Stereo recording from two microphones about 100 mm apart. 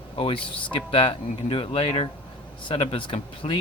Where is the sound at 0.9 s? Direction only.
70° left (ahead or behind).